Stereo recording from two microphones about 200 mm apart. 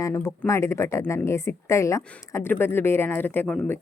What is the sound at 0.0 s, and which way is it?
A woman's voice, 15° left (ahead or behind).